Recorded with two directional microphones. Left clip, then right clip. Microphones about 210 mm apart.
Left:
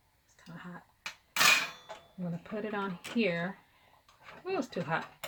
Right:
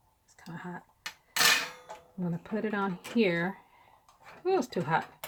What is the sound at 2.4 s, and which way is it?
Speech, 45° right (ahead or behind).